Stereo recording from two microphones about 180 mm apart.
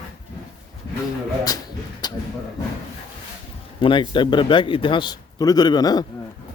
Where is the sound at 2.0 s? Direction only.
25° left (ahead or behind).